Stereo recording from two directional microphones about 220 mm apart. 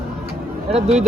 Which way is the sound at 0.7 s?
30° right (ahead or behind).